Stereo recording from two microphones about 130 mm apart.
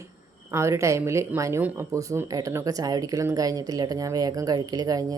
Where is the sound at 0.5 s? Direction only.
20° right (ahead or behind).